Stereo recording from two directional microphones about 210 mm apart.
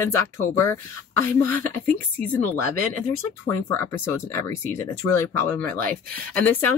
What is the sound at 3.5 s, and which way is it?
Speech, 10° left (ahead or behind).